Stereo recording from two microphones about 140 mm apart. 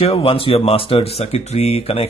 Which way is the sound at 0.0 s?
45° left (ahead or behind).